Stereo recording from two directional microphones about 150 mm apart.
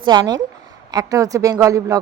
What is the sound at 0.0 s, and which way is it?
Speech, 30° right (ahead or behind).